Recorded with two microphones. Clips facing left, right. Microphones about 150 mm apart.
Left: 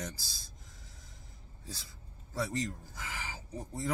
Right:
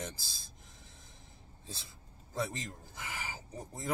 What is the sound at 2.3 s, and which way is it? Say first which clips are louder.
Speech: left 3 dB; 20° right (ahead or behind).